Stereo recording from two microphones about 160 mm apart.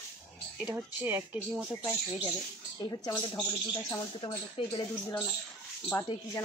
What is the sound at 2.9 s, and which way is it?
Speech, 20° left (ahead or behind).